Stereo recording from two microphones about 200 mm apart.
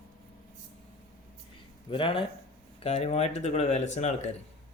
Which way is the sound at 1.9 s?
25° left (ahead or behind).